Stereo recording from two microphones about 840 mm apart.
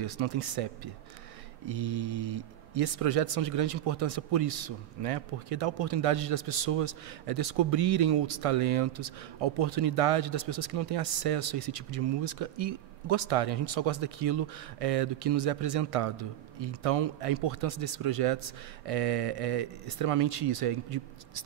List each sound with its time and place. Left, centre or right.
0.0 s speech: right
1.7 s speech: right